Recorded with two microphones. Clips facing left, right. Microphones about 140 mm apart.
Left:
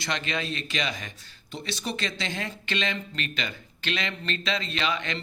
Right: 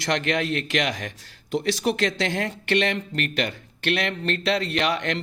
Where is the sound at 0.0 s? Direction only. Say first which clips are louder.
Right 7 dB; 80° right.